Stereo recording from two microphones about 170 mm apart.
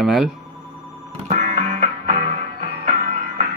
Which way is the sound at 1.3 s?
50° right (ahead or behind).